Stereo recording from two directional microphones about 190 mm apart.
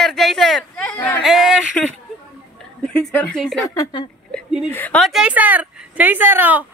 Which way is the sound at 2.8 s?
5° left (ahead or behind).